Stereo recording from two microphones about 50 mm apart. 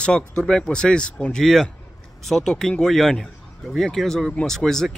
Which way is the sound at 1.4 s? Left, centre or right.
Centre.